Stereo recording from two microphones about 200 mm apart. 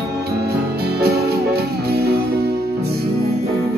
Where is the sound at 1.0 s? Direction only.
50° right (ahead or behind).